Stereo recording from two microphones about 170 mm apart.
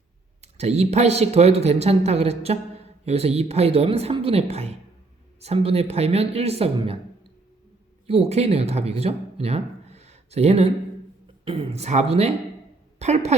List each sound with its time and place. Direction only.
0.4 s speech: 40° right (ahead or behind)
8.0 s a woman's voice: 35° right (ahead or behind)